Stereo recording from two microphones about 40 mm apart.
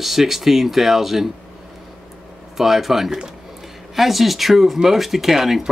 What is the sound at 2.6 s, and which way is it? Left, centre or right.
Speech, centre.